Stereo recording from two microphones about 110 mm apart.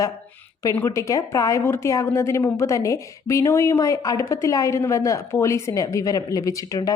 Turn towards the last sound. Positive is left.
turn(degrees=30)  # may be behind; listen again after turning